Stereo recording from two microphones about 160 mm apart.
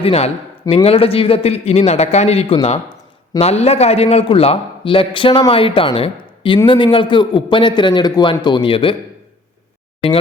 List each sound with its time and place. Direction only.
0.0 s a man's voice: 40° left (ahead or behind)